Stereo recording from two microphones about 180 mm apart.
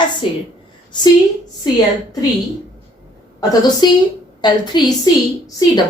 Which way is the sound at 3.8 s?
25° left (ahead or behind).